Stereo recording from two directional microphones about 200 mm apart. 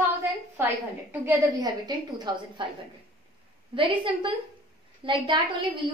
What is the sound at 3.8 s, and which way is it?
A woman's voice, 25° right (ahead or behind).